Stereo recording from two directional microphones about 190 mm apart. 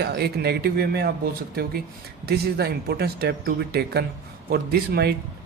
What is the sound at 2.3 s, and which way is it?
Speech, 55° right (ahead or behind).